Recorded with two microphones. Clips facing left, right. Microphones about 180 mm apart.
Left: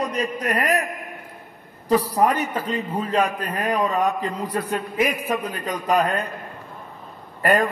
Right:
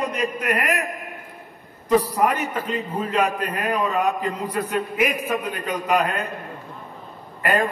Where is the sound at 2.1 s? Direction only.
35° left (ahead or behind).